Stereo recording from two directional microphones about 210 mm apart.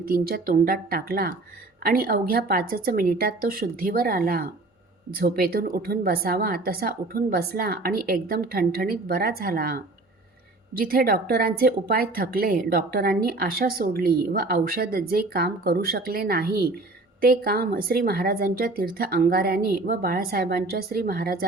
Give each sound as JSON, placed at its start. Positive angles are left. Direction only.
{"t": 0.0, "sound": "speech", "side_deg": -45}